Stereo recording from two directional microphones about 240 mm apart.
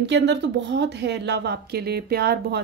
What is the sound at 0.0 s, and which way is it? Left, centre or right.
Speech, right.